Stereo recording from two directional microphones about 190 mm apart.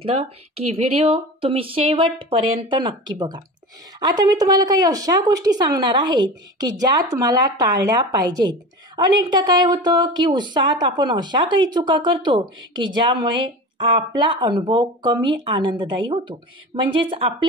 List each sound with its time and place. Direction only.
0.0 s speech: 30° right (ahead or behind)